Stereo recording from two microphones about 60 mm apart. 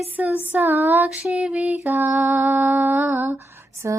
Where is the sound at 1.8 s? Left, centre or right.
Right.